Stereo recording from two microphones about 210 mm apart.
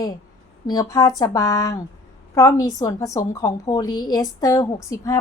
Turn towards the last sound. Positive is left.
turn(degrees=15)  # may be behind; listen again after turning